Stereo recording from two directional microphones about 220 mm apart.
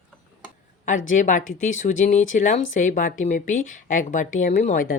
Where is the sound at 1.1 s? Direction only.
35° left (ahead or behind).